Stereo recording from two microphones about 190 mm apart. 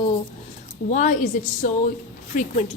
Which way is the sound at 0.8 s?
40° left (ahead or behind).